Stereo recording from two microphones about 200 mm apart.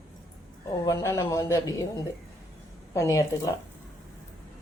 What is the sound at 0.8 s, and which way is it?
Speech, 15° left (ahead or behind).